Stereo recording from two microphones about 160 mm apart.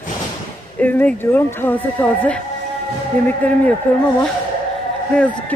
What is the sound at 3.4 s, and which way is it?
Speech, 10° left (ahead or behind).